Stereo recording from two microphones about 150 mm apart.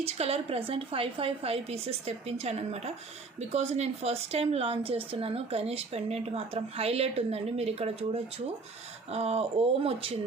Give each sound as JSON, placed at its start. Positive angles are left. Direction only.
{"t": 0.0, "sound": "a woman's voice", "side_deg": -45}